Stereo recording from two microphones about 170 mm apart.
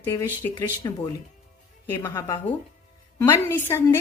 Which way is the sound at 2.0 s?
25° left (ahead or behind).